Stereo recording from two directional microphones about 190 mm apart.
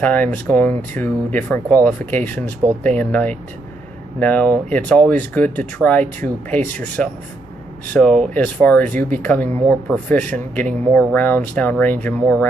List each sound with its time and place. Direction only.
0.0 s speech: 10° left (ahead or behind)